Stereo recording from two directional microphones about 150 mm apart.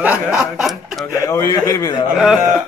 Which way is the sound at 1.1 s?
20° left (ahead or behind).